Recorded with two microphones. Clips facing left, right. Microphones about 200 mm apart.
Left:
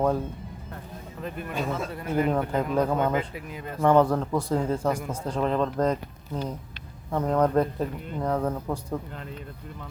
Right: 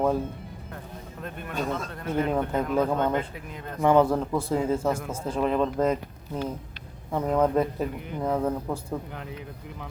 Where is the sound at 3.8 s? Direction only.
5° right (ahead or behind).